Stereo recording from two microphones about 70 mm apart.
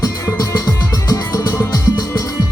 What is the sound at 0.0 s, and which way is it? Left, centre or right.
Music, left.